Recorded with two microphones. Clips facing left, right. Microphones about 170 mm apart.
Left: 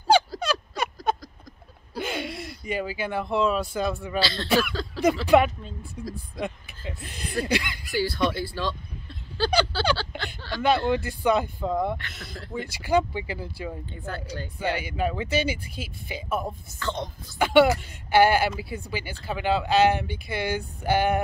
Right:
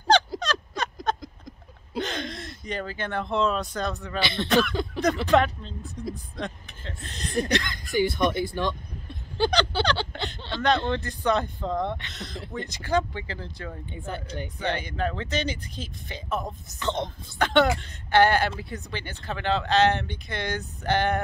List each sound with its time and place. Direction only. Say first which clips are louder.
0.4 s a sound: left 2 dB; 10° left (ahead or behind)
2.6 s speech: left 3 dB; 5° left (ahead or behind)
4.2 s speech: right 1 dB; 20° right (ahead or behind)
4.5 s speech: right 3 dB; 5° left (ahead or behind)
8.0 s speech: right 2 dB; 20° right (ahead or behind)
9.9 s a sound: right 2 dB; 20° right (ahead or behind)
10.9 s speech: left 2 dB; 10° left (ahead or behind)
13.8 s speech: even; 20° right (ahead or behind)
14.6 s speech: left 2 dB; 10° left (ahead or behind)
16.6 s speech: right 2 dB; 20° right (ahead or behind)
17.4 s speech: left 3 dB; 10° left (ahead or behind)